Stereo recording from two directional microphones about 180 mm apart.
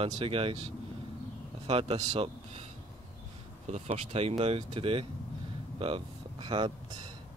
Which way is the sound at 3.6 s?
35° right (ahead or behind).